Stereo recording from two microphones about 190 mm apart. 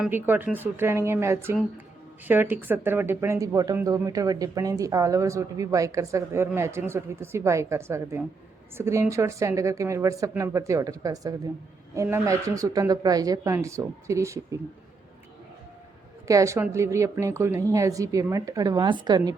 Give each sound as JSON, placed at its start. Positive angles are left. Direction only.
{"t": 0.0, "sound": "speech", "side_deg": -10}
{"t": 16.2, "sound": "speech", "side_deg": -15}